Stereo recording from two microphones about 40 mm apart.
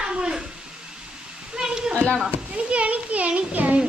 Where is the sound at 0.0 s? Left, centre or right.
Right.